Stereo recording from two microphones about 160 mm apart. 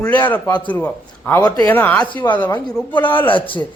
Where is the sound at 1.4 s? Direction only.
25° left (ahead or behind).